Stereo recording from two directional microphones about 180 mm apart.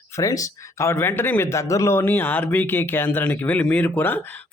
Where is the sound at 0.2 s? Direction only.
20° left (ahead or behind).